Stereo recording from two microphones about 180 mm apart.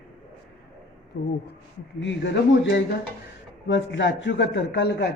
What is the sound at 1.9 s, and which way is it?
A man's voice, 85° left.